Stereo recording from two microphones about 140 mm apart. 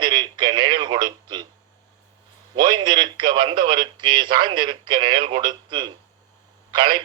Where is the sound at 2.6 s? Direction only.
30° right (ahead or behind).